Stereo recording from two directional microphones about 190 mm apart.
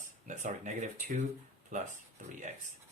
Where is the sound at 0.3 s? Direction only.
40° right (ahead or behind).